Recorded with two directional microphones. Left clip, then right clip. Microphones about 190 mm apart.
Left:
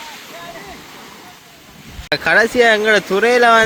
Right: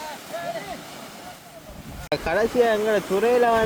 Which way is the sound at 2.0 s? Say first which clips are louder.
Left 8 dB; centre (ahead or behind).